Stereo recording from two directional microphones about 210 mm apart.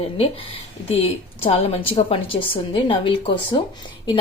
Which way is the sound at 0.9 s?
25° left (ahead or behind).